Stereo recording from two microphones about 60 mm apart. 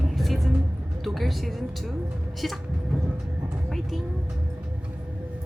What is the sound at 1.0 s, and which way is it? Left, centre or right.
Speech, centre.